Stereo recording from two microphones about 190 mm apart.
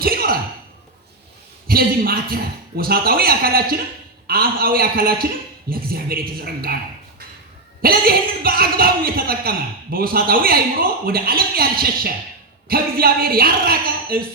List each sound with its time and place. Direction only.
0.0 s a sound: 50° right (ahead or behind)
1.6 s a woman's voice: 50° right (ahead or behind)
7.8 s a woman's voice: 50° right (ahead or behind)